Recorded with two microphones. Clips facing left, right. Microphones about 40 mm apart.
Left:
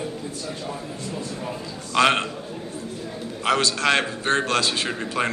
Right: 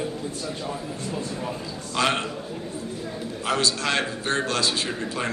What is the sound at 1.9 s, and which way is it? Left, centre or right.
Speech, left.